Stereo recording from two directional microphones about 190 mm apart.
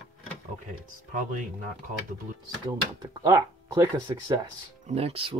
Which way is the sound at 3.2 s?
20° right (ahead or behind).